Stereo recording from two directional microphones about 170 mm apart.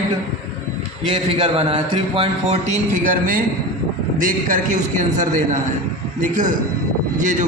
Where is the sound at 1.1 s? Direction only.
30° right (ahead or behind).